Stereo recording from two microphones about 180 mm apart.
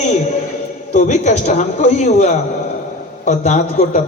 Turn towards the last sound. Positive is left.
turn(degrees=40)  # may be behind; listen again after turning